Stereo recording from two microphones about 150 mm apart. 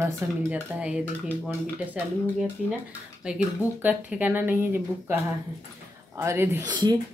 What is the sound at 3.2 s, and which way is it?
Speech, 5° right (ahead or behind).